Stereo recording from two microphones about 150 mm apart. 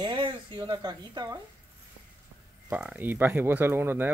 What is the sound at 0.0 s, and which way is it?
Speech, 30° right (ahead or behind).